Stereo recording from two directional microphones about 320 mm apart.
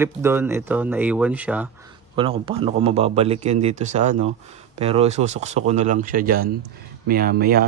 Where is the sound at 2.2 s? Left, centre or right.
Centre.